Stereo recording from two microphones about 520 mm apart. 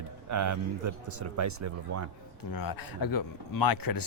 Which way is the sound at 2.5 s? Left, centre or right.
Left.